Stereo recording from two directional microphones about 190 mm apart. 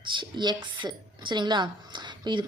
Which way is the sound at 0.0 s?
25° right (ahead or behind).